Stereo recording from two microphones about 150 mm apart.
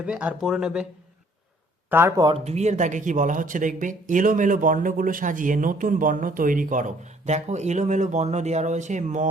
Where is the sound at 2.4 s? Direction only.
50° right (ahead or behind).